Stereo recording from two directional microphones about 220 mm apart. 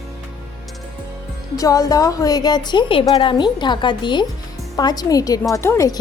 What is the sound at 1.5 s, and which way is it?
A woman's voice, 15° left (ahead or behind).